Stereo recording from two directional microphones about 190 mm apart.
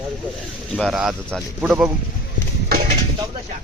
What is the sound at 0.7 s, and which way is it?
Speech, centre (ahead or behind).